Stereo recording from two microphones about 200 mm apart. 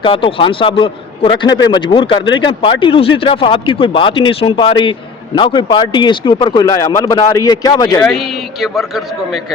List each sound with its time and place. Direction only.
0.0 s speech: 25° left (ahead or behind)